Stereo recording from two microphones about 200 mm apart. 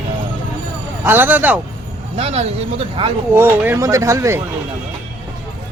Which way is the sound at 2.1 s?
30° right (ahead or behind).